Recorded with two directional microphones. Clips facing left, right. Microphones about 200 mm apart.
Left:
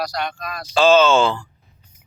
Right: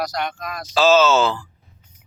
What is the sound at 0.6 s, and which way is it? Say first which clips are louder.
Speech: left 1 dB; 5° right (ahead or behind).